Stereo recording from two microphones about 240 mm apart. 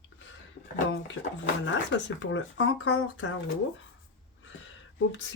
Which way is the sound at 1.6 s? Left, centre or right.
Left.